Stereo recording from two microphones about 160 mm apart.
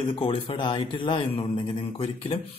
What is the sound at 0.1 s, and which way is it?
A man's voice, 35° left (ahead or behind).